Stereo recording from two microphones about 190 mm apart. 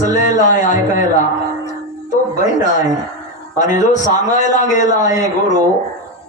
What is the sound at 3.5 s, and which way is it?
A man's voice, 40° left (ahead or behind).